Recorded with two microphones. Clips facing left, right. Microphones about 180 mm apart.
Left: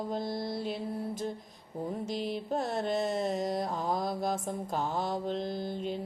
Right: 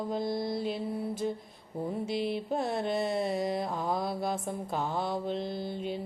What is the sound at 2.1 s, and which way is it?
Mantra, 40° left (ahead or behind).